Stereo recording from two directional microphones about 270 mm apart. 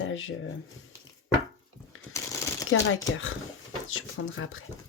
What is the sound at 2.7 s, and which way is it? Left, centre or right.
Speech, left.